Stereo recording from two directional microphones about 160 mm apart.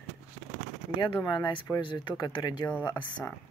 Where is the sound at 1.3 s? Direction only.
30° left (ahead or behind).